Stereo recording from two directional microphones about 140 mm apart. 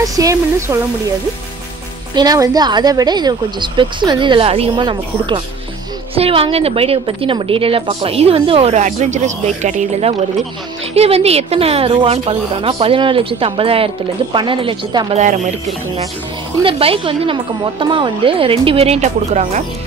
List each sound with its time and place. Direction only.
0.0 s speech: 25° right (ahead or behind)
2.1 s a woman's voice: 25° right (ahead or behind)
15.1 s speech: 60° right (ahead or behind)
16.6 s a woman's voice: 40° right (ahead or behind)